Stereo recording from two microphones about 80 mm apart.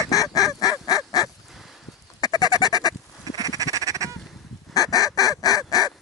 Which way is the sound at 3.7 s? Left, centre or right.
Right.